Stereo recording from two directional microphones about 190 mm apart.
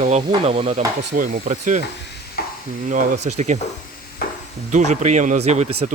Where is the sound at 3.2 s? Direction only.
35° right (ahead or behind).